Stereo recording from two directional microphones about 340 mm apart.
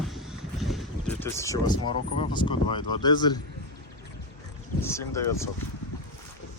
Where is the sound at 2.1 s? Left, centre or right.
Centre.